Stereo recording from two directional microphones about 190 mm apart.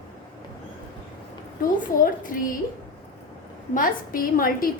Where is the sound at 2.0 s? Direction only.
45° left (ahead or behind).